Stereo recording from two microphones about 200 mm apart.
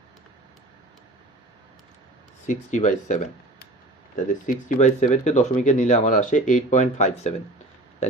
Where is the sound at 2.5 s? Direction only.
35° left (ahead or behind).